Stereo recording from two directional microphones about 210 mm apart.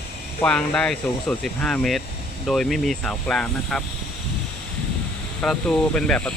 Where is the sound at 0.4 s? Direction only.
5° left (ahead or behind).